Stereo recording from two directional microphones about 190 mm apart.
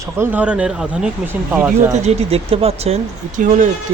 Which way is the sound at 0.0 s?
10° right (ahead or behind).